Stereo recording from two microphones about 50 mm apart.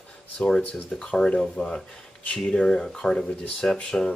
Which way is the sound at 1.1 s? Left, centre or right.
Centre.